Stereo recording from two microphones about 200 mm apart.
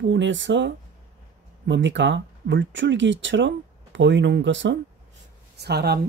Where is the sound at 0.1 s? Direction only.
65° right (ahead or behind).